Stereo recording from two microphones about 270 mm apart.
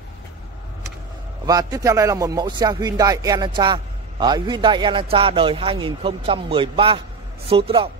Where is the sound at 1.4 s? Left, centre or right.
Centre.